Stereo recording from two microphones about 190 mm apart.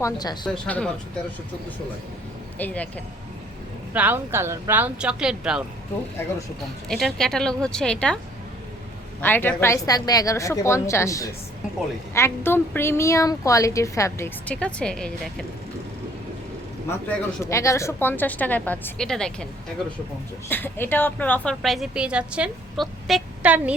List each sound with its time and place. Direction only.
0.0 s speech: 20° left (ahead or behind)
0.4 s a woman's voice: 5° left (ahead or behind)
2.6 s a woman's voice: 10° left (ahead or behind)
3.9 s speech: 10° right (ahead or behind)
6.8 s a woman's voice: centre (ahead or behind)
9.2 s a woman's voice: 10° left (ahead or behind)
17.1 s a woman's voice: 15° left (ahead or behind)
20.5 s a woman's voice: 10° left (ahead or behind); by 23.7 s 5° right (ahead or behind)